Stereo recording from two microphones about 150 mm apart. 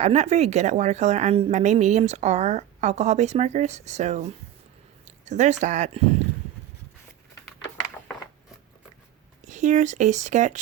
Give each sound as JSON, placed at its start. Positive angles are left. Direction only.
{"t": 0.0, "sound": "a woman's voice", "side_deg": -50}
{"t": 9.4, "sound": "a woman's voice", "side_deg": -55}